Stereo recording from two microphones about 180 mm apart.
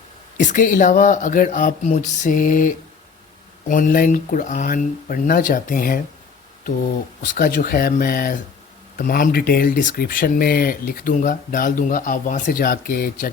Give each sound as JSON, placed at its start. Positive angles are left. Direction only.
{"t": 0.3, "sound": "speech", "side_deg": 45}
{"t": 7.3, "sound": "speech", "side_deg": 50}